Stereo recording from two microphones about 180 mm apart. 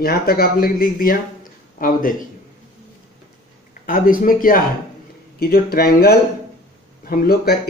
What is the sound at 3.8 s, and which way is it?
A man's voice, 50° left (ahead or behind).